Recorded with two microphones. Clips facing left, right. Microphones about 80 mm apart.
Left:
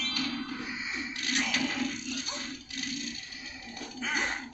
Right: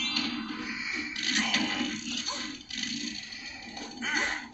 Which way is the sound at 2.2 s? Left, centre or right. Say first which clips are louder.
Right 1 dB; right.